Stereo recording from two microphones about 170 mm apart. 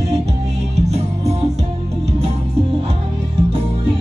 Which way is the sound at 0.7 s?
40° right (ahead or behind).